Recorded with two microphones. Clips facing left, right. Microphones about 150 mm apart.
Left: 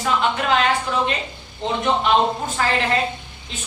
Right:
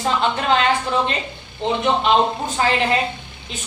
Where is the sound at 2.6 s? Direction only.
20° right (ahead or behind).